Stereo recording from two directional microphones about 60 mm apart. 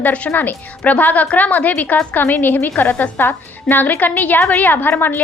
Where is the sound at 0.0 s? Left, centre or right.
Left.